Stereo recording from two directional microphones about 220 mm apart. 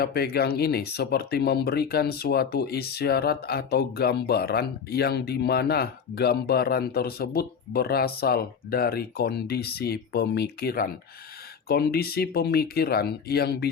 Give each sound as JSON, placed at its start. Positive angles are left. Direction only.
{"t": 0.0, "sound": "speech", "side_deg": 45}